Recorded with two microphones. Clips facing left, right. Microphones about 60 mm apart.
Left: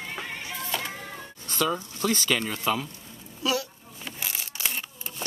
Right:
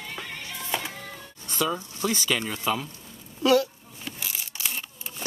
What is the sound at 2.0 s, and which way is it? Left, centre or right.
Speech, centre.